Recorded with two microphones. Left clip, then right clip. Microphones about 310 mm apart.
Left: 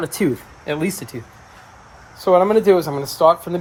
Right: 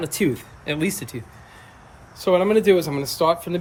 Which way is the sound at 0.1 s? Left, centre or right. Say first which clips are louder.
Left 2 dB; centre.